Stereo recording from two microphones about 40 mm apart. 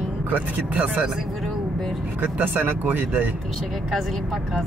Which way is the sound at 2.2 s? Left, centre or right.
Right.